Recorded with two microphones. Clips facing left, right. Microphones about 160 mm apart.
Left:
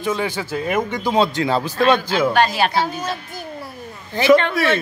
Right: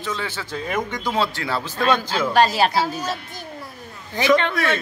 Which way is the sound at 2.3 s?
35° right (ahead or behind).